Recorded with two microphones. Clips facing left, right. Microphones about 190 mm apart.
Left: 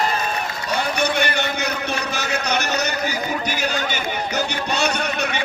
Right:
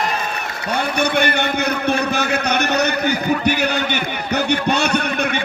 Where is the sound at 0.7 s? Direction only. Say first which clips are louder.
Right 3 dB; 55° right (ahead or behind).